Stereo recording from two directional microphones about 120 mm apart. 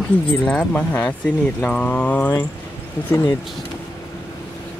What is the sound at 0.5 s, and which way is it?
Speech, 10° left (ahead or behind).